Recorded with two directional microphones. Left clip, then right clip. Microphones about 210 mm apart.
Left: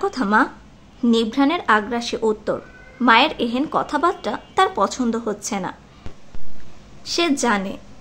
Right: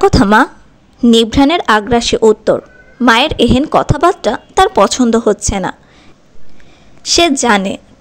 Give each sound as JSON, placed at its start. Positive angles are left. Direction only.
{"t": 0.0, "sound": "a woman's voice", "side_deg": -40}
{"t": 7.0, "sound": "a woman's voice", "side_deg": -35}